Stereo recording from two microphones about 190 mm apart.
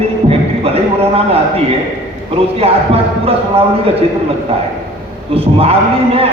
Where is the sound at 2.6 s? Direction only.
30° right (ahead or behind).